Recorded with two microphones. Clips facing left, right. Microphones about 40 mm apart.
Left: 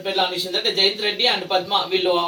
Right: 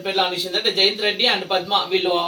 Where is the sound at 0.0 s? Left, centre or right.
Centre.